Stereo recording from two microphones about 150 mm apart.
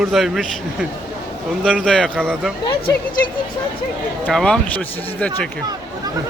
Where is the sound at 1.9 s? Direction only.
5° left (ahead or behind).